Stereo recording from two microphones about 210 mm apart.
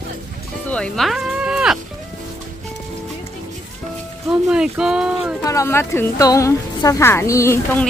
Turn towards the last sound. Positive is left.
turn(degrees=10)  # may be behind; listen again after turning